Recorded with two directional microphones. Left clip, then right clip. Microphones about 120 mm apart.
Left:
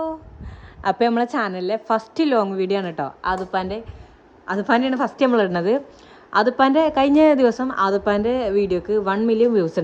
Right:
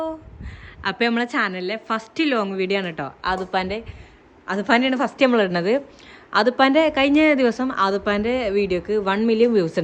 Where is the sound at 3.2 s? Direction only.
20° left (ahead or behind).